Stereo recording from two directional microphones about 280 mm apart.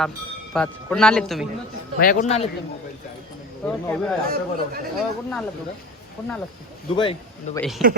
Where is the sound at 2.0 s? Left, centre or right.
Left.